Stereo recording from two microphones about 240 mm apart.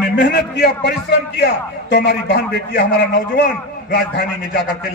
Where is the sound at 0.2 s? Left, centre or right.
Left.